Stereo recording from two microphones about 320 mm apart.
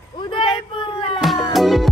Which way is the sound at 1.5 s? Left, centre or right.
Centre.